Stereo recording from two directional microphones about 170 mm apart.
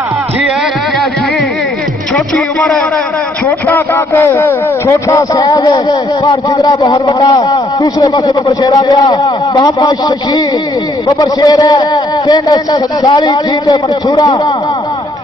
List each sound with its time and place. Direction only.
2.1 s music: 5° left (ahead or behind)
3.4 s a man's voice: 15° left (ahead or behind)